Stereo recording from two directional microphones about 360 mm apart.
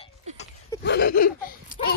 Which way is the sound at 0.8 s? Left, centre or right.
Left.